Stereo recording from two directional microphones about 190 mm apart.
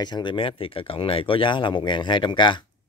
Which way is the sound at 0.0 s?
25° left (ahead or behind).